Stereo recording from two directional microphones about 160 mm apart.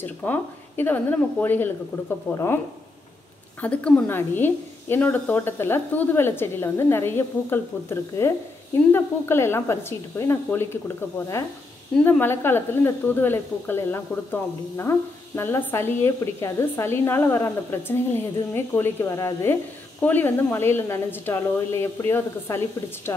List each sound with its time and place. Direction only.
0.0 s speech: 10° left (ahead or behind)
3.6 s speech: 10° left (ahead or behind)
12.0 s speech: 10° left (ahead or behind)